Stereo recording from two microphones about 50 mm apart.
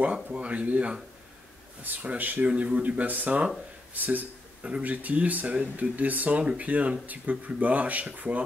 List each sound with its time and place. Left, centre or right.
0.0 s speech: right
2.0 s speech: right